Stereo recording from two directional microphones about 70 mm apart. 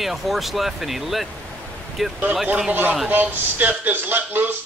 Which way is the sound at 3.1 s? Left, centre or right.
Right.